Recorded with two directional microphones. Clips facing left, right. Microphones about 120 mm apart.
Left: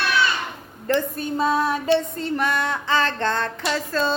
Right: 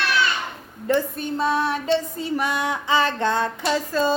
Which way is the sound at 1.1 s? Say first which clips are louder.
Left 1 dB; 5° left (ahead or behind).